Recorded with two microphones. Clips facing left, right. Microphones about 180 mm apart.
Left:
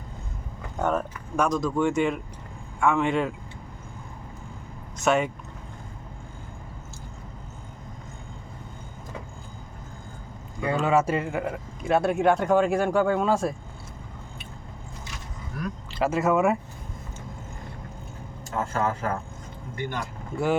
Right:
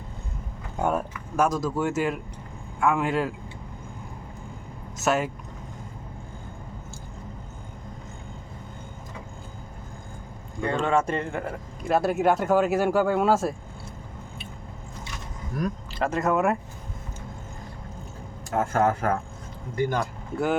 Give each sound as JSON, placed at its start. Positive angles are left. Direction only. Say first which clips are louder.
{"t": 0.8, "sound": "speech", "louder": "even", "side_deg": -10}
{"t": 4.9, "sound": "speech", "louder": "left 2 dB", "side_deg": 0}
{"t": 10.6, "sound": "speech", "louder": "left 1 dB", "side_deg": 5}
{"t": 15.6, "sound": "speech", "louder": "right 4 dB", "side_deg": -40}
{"t": 16.0, "sound": "speech", "louder": "left 2 dB", "side_deg": 5}
{"t": 18.5, "sound": "speech", "louder": "right 4 dB", "side_deg": -55}